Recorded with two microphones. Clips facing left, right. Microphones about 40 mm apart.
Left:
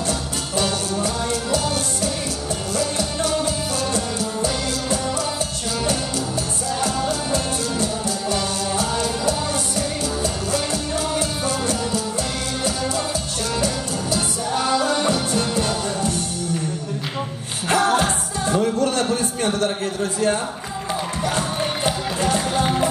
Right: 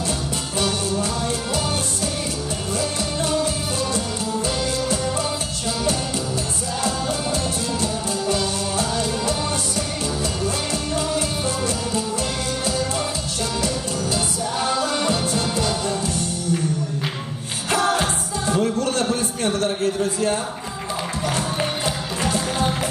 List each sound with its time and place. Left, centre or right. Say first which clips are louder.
10.2 s music: left 1 dB; right
11.1 s music: even; left
14.7 s music: left 3 dB; left
17.6 s music: left 2 dB; left
18.8 s a sound: left 1 dB; left
21.2 s music: even; left